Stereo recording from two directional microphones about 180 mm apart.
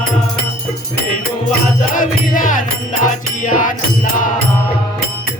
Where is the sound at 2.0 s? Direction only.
50° left (ahead or behind).